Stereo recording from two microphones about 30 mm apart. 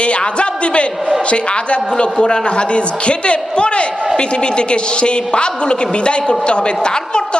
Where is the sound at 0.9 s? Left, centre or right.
Centre.